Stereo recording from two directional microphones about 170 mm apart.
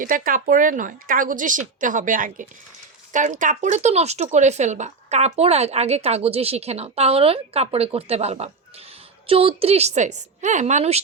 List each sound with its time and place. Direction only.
0.0 s a woman's voice: 55° right (ahead or behind)